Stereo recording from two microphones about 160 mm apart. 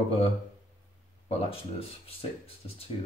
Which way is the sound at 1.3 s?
35° left (ahead or behind).